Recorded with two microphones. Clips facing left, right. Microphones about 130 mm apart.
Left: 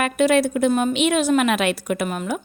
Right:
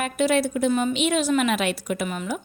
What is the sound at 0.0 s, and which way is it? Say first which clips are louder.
A woman's voice: left 4 dB; 65° left (ahead or behind).